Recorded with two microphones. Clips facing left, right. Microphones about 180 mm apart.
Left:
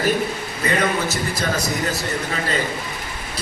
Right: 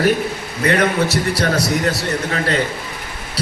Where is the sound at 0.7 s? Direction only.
70° right (ahead or behind).